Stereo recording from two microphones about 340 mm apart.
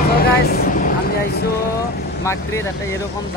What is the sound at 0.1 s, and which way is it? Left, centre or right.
Vehicle, left.